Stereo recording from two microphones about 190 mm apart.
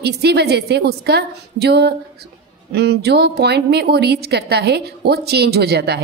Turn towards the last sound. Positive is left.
turn(degrees=-60)  # may be behind; listen again after turning